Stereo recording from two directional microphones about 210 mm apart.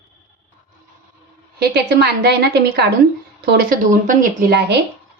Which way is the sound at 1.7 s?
50° right (ahead or behind).